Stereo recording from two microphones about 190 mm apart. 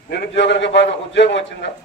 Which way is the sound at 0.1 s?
65° left (ahead or behind).